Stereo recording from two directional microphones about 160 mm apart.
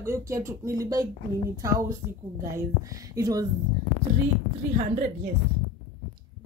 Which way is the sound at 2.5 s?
20° right (ahead or behind).